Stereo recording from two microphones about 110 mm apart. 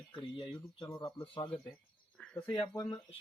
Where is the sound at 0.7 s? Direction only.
35° left (ahead or behind).